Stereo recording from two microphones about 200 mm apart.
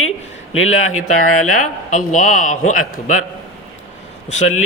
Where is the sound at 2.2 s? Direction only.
90° left.